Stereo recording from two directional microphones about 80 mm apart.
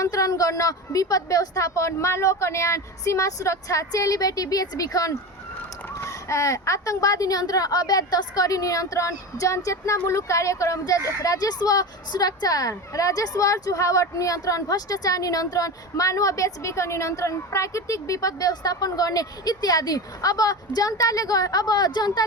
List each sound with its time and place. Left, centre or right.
0.0 s speech: left